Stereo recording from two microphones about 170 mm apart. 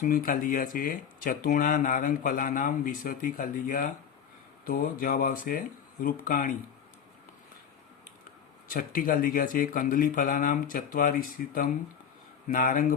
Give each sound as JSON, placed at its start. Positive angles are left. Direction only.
{"t": 0.0, "sound": "speech", "side_deg": 55}
{"t": 8.7, "sound": "speech", "side_deg": 55}